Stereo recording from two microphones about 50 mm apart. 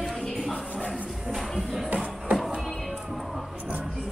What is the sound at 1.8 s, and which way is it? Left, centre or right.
Music, centre.